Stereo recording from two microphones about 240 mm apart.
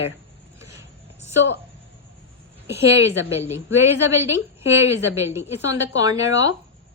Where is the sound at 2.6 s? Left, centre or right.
Centre.